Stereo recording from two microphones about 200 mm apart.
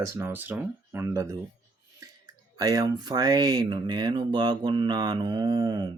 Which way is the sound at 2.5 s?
20° right (ahead or behind).